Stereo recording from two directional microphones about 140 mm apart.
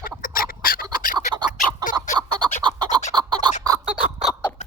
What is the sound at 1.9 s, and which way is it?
Fowl, 70° left (ahead or behind).